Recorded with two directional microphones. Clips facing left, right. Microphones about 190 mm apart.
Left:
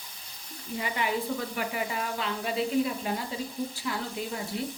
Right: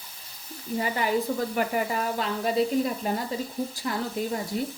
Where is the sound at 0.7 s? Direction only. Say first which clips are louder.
Right 5 dB; 40° right (ahead or behind).